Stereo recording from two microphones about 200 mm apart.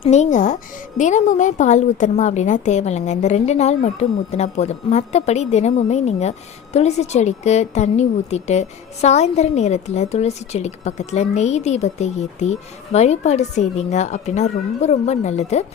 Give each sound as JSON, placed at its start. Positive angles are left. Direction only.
{"t": 0.0, "sound": "a woman's voice", "side_deg": 35}